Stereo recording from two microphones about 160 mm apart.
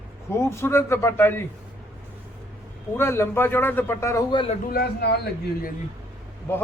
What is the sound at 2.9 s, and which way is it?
A man's voice, 15° left (ahead or behind).